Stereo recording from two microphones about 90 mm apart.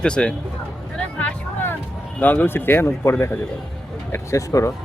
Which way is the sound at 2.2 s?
20° left (ahead or behind).